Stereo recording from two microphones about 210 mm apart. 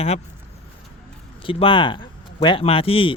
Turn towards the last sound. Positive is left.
turn(degrees=25)  # may be behind; listen again after turning